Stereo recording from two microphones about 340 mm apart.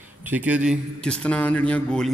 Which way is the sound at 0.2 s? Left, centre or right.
Centre.